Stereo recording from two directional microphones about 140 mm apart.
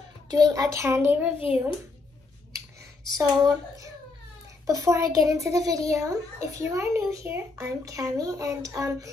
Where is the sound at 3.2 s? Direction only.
25° right (ahead or behind).